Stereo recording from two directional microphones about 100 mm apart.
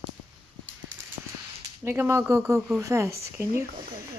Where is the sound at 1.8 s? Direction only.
25° right (ahead or behind).